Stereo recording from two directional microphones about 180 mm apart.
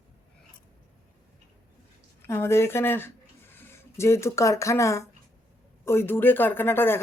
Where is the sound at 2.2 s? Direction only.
15° left (ahead or behind).